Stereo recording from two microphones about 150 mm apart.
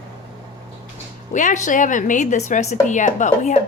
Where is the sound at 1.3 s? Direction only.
55° left (ahead or behind).